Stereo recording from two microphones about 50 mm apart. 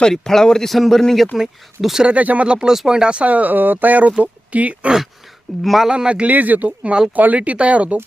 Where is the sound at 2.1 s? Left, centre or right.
Right.